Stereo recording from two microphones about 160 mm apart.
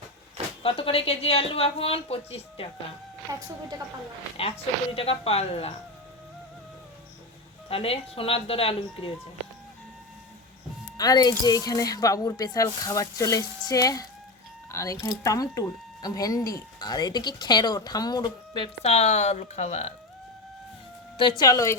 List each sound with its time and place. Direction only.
0.6 s speech: 35° left (ahead or behind)
4.4 s speech: 35° left (ahead or behind)
7.7 s speech: 35° left (ahead or behind)
10.9 s speech: 25° left (ahead or behind); by 19.9 s 45° left (ahead or behind)
21.2 s speech: 30° left (ahead or behind)